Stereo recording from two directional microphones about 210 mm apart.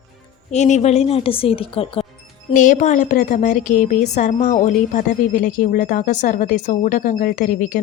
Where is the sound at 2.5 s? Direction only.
40° left (ahead or behind).